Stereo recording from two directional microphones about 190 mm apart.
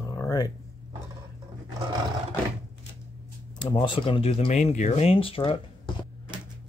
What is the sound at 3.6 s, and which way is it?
Speech, 25° left (ahead or behind).